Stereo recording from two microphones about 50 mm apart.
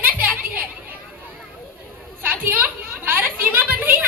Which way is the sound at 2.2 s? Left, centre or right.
Right.